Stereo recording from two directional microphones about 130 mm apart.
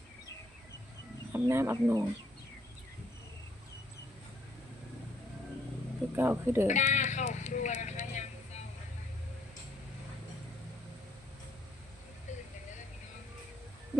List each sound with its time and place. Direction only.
1.3 s speech: 20° right (ahead or behind)
6.1 s speech: 15° right (ahead or behind)
6.7 s a sound: 70° left (ahead or behind)
12.3 s vehicle: 65° left (ahead or behind)